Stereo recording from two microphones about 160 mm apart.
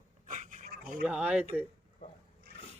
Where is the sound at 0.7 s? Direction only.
60° right (ahead or behind).